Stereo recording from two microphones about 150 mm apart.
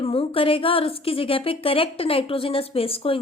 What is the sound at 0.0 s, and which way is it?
A woman's voice, 40° left (ahead or behind).